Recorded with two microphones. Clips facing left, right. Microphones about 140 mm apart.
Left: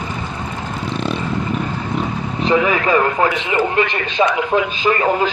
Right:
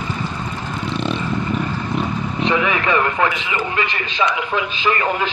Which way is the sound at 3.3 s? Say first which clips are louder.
Left 6 dB; 50° left (ahead or behind).